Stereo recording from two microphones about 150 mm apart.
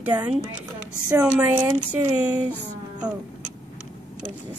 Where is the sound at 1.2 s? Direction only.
10° right (ahead or behind).